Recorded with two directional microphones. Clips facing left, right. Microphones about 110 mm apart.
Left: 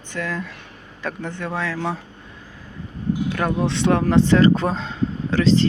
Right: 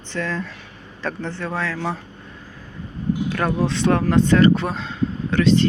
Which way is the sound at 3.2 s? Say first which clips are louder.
Right 1 dB; 15° left (ahead or behind).